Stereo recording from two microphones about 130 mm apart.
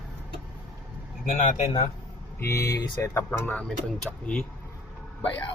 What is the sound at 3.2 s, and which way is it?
Speech, 10° left (ahead or behind).